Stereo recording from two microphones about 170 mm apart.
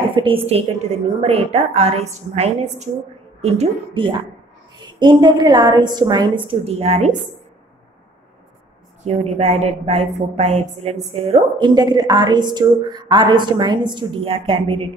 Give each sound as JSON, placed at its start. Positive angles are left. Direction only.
{"t": 0.1, "sound": "a woman's voice", "side_deg": -30}
{"t": 9.0, "sound": "a woman's voice", "side_deg": -40}